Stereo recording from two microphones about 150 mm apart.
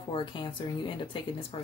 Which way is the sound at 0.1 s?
35° left (ahead or behind).